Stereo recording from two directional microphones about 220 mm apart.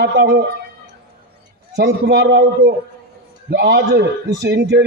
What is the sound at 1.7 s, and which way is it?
A man's voice, 50° right (ahead or behind).